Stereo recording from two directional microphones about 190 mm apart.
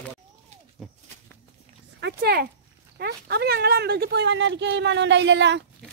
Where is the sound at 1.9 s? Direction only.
60° right (ahead or behind).